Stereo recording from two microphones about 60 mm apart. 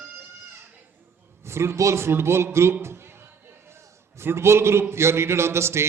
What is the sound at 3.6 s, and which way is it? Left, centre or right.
A man's voice, right.